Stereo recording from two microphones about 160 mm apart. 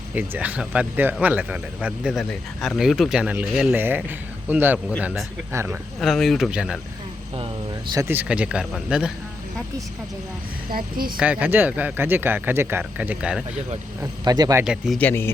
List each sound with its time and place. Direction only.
0.1 s speech: 10° right (ahead or behind)
6.0 s speech: centre (ahead or behind)
7.9 s speech: 15° right (ahead or behind)
10.7 s speech: 65° right (ahead or behind)
11.2 s speech: 10° right (ahead or behind)
14.0 s speech: 25° right (ahead or behind)
14.6 s speech: 5° right (ahead or behind)
14.9 s speech: 15° left (ahead or behind)